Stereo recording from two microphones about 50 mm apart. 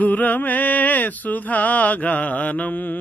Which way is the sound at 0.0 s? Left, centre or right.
Left.